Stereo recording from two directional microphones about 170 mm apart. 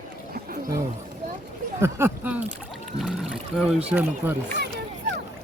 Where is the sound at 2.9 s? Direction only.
Centre (ahead or behind).